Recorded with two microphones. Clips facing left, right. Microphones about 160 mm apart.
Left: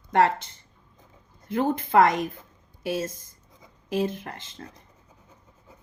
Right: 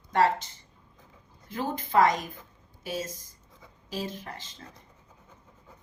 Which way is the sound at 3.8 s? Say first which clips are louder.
Left 8 dB; 55° left (ahead or behind).